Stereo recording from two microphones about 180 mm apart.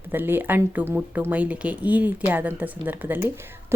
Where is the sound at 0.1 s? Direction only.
10° right (ahead or behind).